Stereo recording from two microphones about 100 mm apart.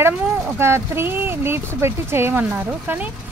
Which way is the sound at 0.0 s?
25° right (ahead or behind).